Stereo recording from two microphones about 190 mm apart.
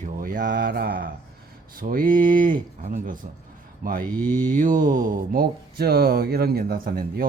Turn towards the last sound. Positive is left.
turn(degrees=-50)  # may be behind; listen again after turning